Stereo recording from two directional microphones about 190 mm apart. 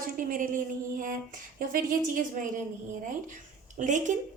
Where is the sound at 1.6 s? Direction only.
45° right (ahead or behind).